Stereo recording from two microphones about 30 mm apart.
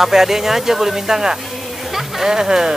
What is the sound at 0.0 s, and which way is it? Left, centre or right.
Speech, centre.